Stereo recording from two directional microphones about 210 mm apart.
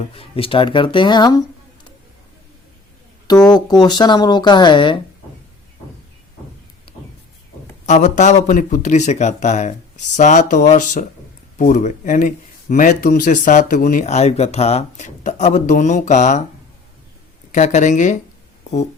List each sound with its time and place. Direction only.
0.1 s speech: 25° left (ahead or behind)
3.5 s speech: 20° left (ahead or behind)
6.9 s vehicle: 25° left (ahead or behind)
7.9 s speech: 35° left (ahead or behind)
17.5 s speech: 35° left (ahead or behind)